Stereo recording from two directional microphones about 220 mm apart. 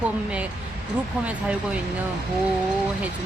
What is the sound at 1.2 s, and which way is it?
Speech, 5° right (ahead or behind).